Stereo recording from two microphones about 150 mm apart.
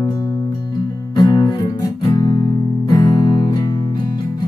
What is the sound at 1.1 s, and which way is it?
Music, 30° left (ahead or behind).